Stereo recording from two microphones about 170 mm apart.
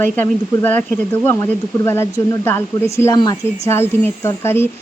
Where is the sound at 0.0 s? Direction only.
10° left (ahead or behind).